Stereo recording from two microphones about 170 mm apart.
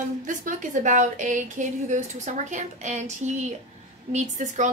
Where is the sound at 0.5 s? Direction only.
50° right (ahead or behind).